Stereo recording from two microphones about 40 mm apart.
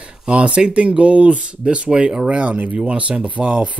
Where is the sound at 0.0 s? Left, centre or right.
Right.